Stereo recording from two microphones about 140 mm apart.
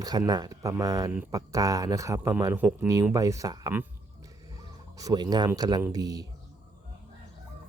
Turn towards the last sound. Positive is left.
turn(degrees=-25)  # may be behind; listen again after turning